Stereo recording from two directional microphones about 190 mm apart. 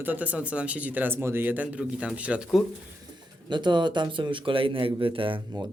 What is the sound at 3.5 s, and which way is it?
Speech, 25° right (ahead or behind).